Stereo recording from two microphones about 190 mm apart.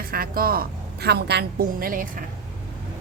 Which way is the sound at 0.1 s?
50° right (ahead or behind).